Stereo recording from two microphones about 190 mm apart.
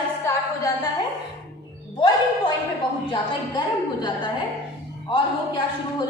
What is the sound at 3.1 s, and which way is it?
A woman's voice, 25° left (ahead or behind).